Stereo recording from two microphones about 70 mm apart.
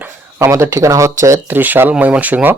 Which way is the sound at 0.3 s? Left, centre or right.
Right.